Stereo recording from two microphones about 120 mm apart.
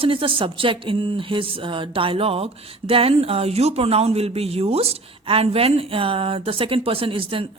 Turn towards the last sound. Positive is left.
turn(degrees=-50)  # may be behind; listen again after turning